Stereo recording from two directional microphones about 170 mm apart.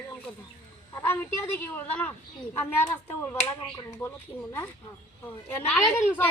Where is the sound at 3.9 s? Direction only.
15° left (ahead or behind).